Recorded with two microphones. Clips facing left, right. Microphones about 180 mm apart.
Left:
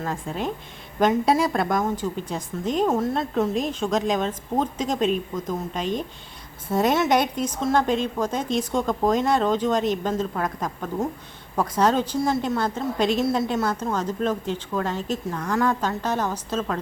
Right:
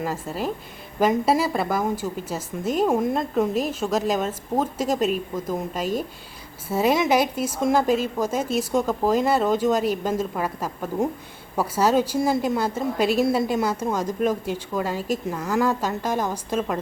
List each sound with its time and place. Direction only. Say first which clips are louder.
0.0 s a woman's voice: right 1 dB; 5° right (ahead or behind)